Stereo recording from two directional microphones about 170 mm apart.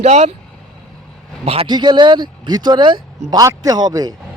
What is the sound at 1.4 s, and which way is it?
Speech, 30° right (ahead or behind).